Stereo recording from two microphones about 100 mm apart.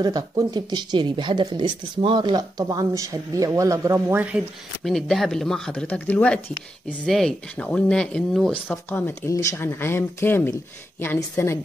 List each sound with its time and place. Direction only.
0.0 s speech: 40° right (ahead or behind); by 4.3 s 25° right (ahead or behind)
4.8 s speech: centre (ahead or behind)
8.6 s speech: 20° left (ahead or behind)
9.3 s speech: 30° left (ahead or behind)